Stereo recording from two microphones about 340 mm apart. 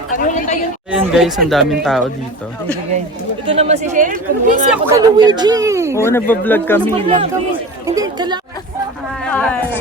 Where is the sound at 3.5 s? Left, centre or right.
Centre.